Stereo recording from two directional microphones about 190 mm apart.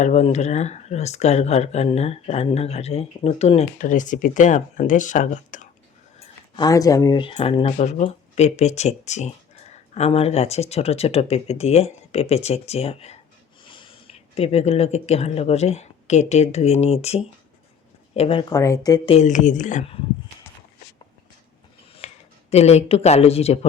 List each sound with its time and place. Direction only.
0.0 s speech: 35° left (ahead or behind)
6.1 s speech: 20° left (ahead or behind)
19.1 s speech: 40° left (ahead or behind)
21.9 s speech: 35° left (ahead or behind)